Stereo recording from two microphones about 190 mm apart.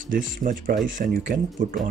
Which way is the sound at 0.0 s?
45° right (ahead or behind).